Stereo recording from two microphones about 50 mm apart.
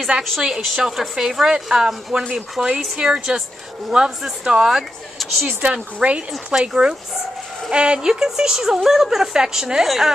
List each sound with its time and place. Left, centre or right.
0.4 s speech: centre
5.2 s a woman's voice: centre
5.7 s speech: right
6.7 s speech: centre